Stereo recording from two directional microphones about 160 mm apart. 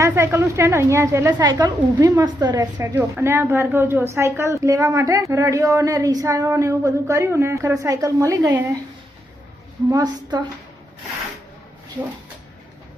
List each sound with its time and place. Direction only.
0.0 s a woman's voice: 15° right (ahead or behind)
2.8 s a woman's voice: 15° right (ahead or behind)
9.9 s a woman's voice: 25° right (ahead or behind)